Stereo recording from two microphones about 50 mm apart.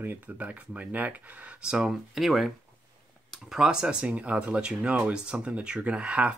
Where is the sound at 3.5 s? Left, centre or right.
Centre.